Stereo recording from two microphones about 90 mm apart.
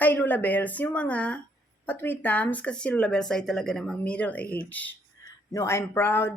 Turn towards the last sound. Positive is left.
turn(degrees=25)  # may be behind; listen again after turning